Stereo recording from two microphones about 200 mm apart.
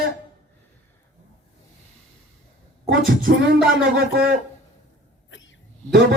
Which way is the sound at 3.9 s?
50° right (ahead or behind).